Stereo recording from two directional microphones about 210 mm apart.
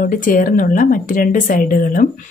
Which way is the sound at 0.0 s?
40° left (ahead or behind).